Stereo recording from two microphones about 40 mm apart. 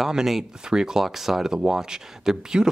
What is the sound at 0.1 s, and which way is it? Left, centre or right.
Speech, centre.